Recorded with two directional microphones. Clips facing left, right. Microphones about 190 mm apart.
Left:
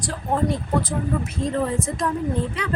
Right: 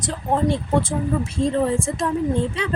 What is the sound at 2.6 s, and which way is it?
Speech, 25° right (ahead or behind).